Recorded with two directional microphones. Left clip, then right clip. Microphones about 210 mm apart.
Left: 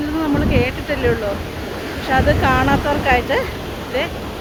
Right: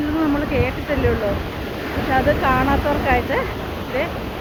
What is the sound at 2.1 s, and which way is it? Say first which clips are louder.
Speech: left 2 dB; 15° left (ahead or behind).